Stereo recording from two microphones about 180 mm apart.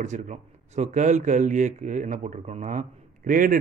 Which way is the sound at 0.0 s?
40° right (ahead or behind).